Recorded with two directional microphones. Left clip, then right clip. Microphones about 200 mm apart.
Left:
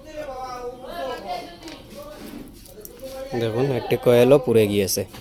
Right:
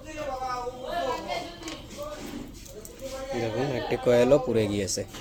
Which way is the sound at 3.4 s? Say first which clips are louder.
Left 7 dB; 35° left (ahead or behind).